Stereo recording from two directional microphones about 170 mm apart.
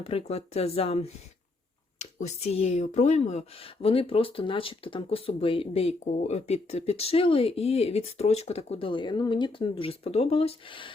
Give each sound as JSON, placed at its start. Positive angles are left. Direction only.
{"t": 0.0, "sound": "speech", "side_deg": 35}
{"t": 2.1, "sound": "speech", "side_deg": 40}